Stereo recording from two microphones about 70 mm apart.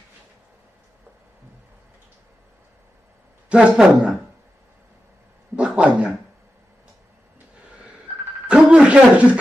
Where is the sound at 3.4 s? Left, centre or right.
Centre.